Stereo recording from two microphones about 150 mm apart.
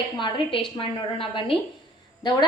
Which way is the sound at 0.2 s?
35° left (ahead or behind).